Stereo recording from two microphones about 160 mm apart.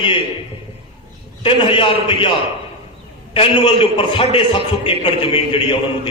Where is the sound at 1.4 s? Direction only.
35° left (ahead or behind).